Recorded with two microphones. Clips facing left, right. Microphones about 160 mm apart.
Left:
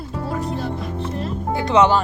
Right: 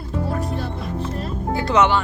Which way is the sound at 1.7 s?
35° left (ahead or behind).